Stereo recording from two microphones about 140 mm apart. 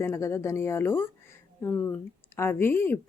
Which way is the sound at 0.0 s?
20° left (ahead or behind).